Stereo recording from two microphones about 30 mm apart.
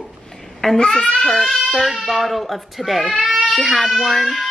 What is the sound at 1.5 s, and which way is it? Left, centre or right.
A woman's voice, centre.